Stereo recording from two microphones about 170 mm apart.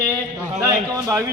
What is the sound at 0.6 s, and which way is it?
Speech, 20° right (ahead or behind).